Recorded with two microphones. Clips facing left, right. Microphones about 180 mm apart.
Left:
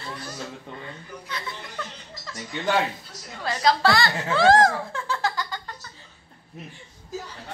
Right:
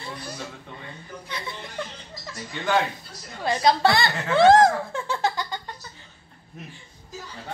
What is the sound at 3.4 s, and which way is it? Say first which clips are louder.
Speech: right 1 dB; 20° right (ahead or behind).